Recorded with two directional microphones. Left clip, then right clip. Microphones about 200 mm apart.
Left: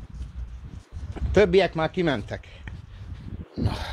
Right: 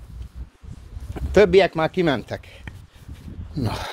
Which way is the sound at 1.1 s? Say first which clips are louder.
Right 4 dB; 35° right (ahead or behind).